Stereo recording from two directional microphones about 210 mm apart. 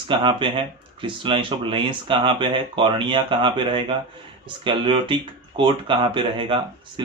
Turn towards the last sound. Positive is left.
turn(degrees=-25)  # may be behind; listen again after turning